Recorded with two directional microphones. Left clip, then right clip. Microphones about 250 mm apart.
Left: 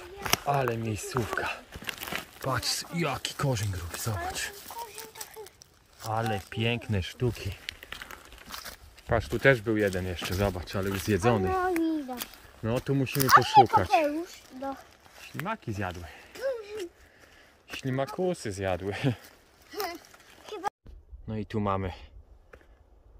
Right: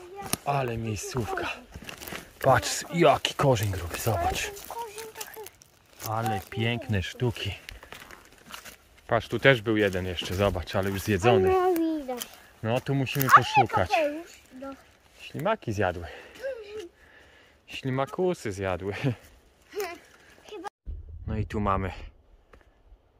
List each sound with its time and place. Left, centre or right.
0.5 s speech: centre
2.4 s speech: centre
6.1 s speech: centre
11.4 s a sound: right
12.6 s speech: centre
15.4 s speech: centre
16.4 s a sound: centre
17.6 s speech: centre
19.7 s a sound: centre
20.4 s music: centre
21.3 s speech: centre